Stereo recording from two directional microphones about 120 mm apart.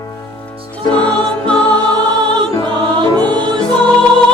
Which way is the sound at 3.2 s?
10° left (ahead or behind).